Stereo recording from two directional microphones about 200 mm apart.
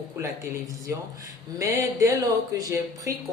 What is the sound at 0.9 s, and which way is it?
A woman's voice, 15° right (ahead or behind).